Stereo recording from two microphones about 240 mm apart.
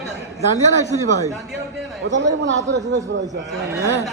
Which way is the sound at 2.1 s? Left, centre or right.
Right.